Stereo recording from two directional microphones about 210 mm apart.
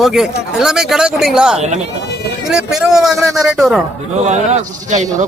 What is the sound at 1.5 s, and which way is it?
Speech, 30° right (ahead or behind).